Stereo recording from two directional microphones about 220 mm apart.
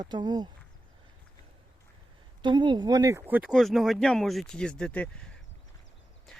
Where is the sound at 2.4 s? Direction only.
20° right (ahead or behind).